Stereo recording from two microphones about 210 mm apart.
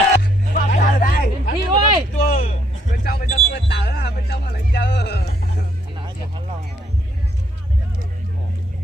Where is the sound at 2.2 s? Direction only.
40° left (ahead or behind).